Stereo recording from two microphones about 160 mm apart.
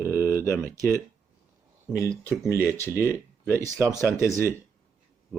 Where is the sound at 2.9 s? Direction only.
15° left (ahead or behind).